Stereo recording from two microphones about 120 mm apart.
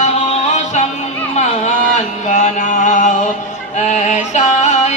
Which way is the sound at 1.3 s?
75° left (ahead or behind).